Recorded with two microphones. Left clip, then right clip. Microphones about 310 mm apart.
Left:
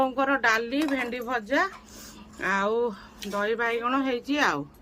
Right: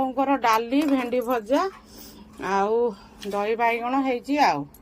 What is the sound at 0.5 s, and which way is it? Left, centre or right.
Speech, centre.